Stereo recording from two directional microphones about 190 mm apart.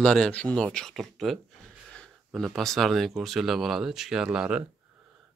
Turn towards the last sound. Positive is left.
turn(degrees=-5)  # may be behind; listen again after turning